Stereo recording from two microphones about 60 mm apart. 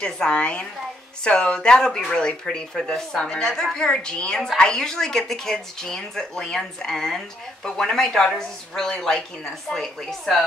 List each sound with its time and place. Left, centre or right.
0.0 s a woman's voice: centre